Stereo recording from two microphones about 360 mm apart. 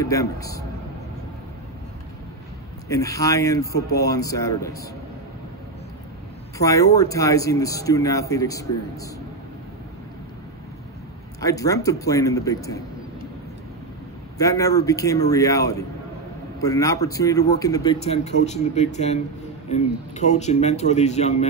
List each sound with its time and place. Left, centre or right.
0.0 s a man's voice: centre
2.9 s a man's voice: centre
6.6 s a man's voice: centre
11.4 s a man's voice: centre
14.4 s a man's voice: centre